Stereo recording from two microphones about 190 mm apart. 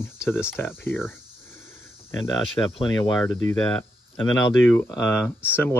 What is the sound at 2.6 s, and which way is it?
Speech, 15° left (ahead or behind).